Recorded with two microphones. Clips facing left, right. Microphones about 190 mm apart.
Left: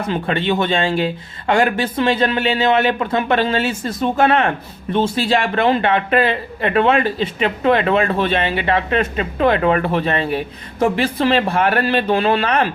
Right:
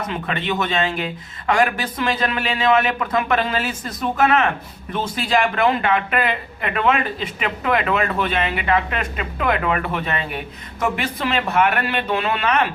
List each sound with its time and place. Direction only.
0.1 s speech: 30° left (ahead or behind)